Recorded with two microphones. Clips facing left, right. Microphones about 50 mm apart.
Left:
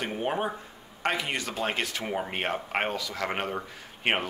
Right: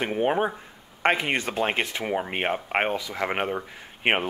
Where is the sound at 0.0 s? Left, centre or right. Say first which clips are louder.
Right 5 dB; right.